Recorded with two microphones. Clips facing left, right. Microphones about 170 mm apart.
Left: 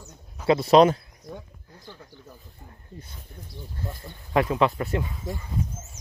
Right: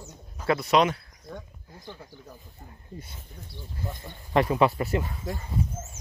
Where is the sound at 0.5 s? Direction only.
30° left (ahead or behind).